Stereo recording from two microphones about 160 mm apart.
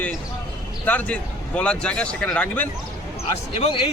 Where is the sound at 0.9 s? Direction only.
10° left (ahead or behind).